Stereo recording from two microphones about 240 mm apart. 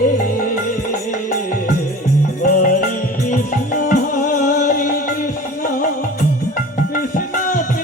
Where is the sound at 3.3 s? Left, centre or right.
Left.